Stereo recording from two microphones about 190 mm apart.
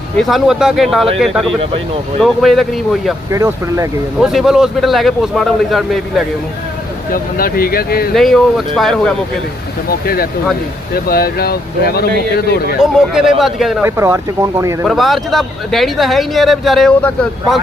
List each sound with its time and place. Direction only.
0.2 s speech: centre (ahead or behind)
3.3 s speech: 15° right (ahead or behind)
4.2 s speech: centre (ahead or behind)
7.1 s speech: 50° left (ahead or behind)
8.1 s speech: centre (ahead or behind)
10.9 s speech: 50° left (ahead or behind)
12.8 s speech: centre (ahead or behind)
13.8 s speech: 15° right (ahead or behind)
14.8 s speech: centre (ahead or behind)